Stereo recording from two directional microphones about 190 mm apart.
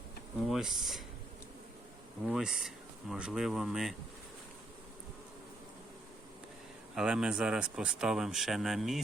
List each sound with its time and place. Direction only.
0.4 s speech: centre (ahead or behind)
2.2 s speech: 5° right (ahead or behind)
6.9 s speech: 5° right (ahead or behind)